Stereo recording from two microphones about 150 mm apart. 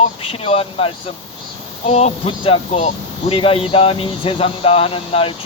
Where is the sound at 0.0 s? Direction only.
40° left (ahead or behind).